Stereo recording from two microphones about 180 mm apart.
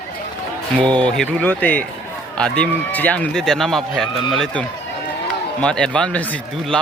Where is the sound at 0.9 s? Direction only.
5° left (ahead or behind).